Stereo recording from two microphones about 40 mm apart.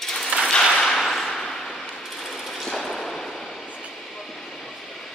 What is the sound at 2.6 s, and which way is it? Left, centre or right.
Whip, centre.